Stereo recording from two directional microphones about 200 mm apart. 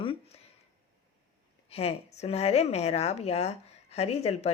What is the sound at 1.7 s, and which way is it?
A woman's voice, 30° left (ahead or behind).